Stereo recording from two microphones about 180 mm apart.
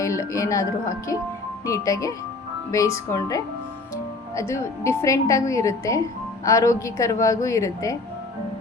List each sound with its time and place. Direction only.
0.0 s speech: 15° left (ahead or behind)